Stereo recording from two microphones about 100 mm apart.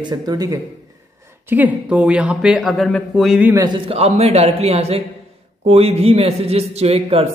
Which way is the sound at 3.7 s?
80° right.